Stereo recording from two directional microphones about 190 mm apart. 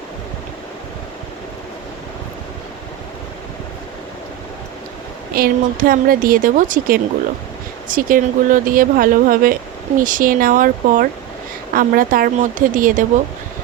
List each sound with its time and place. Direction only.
5.3 s a woman's voice: 50° right (ahead or behind)